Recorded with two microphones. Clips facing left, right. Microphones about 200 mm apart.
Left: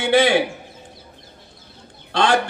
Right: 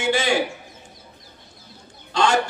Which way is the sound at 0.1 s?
60° left (ahead or behind).